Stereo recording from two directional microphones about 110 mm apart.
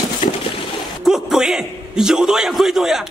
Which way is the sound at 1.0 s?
5° right (ahead or behind).